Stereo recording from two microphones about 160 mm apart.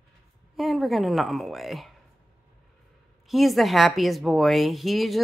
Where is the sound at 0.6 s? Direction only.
Centre (ahead or behind).